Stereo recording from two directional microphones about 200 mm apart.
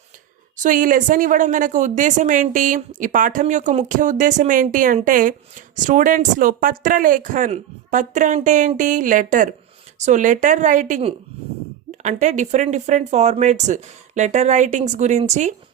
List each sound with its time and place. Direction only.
0.5 s a woman's voice: 40° right (ahead or behind)